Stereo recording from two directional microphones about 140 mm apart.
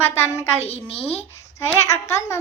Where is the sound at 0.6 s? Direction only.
45° left (ahead or behind).